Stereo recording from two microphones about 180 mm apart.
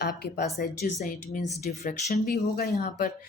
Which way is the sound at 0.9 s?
45° left (ahead or behind).